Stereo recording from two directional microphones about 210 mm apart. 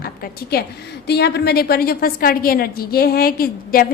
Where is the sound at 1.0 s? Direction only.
50° left (ahead or behind).